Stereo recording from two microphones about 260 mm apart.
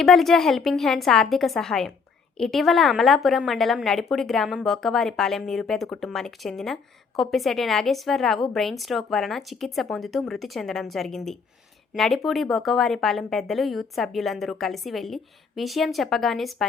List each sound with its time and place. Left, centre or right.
0.0 s a woman's voice: centre